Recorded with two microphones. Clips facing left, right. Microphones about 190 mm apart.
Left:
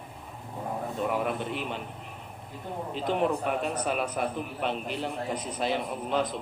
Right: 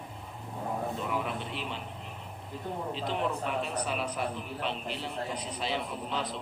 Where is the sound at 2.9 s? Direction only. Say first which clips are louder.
Left 7 dB; 50° left (ahead or behind).